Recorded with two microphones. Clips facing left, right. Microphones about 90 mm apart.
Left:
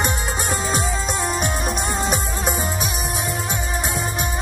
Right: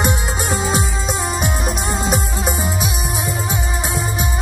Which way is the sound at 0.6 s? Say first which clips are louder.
Right 2 dB; 5° right (ahead or behind).